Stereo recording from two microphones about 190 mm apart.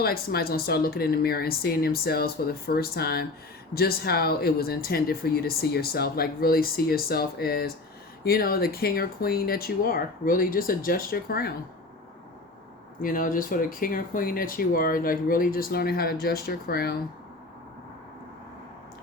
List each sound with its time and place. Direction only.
0.0 s speech: 55° left (ahead or behind)
13.0 s speech: 45° left (ahead or behind)